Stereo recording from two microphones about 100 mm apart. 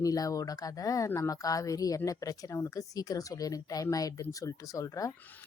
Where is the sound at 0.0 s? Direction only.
35° left (ahead or behind).